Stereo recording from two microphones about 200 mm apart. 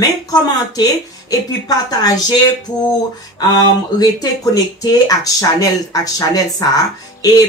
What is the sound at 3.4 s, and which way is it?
Speech, 20° left (ahead or behind).